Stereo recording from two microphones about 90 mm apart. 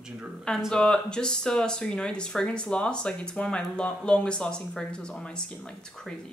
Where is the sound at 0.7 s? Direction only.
10° left (ahead or behind).